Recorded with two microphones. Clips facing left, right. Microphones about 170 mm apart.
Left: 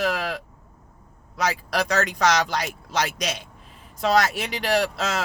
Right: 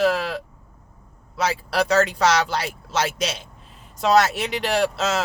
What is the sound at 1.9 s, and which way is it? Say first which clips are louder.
Speech: right 3 dB; 30° right (ahead or behind).